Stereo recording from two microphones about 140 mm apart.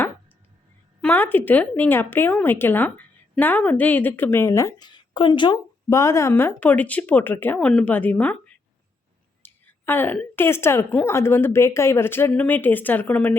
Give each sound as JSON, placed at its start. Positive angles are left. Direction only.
{"t": 1.0, "sound": "speech", "side_deg": 10}
{"t": 5.9, "sound": "speech", "side_deg": 20}